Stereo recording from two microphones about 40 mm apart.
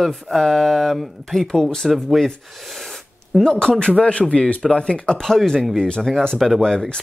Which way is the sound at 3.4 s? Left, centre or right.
Centre.